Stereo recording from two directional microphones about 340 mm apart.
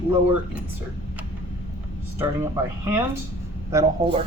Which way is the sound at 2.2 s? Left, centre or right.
Centre.